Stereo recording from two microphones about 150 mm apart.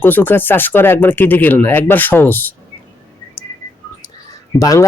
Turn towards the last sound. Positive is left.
turn(degrees=20)  # may be behind; listen again after turning